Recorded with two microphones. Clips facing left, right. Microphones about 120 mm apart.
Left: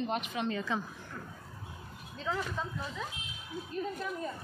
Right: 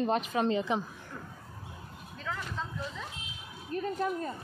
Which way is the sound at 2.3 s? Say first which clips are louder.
Left 4 dB; 20° left (ahead or behind).